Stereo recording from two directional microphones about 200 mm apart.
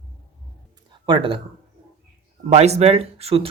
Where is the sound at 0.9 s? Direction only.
25° right (ahead or behind).